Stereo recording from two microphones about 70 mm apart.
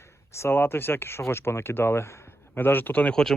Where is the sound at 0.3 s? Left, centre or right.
Left.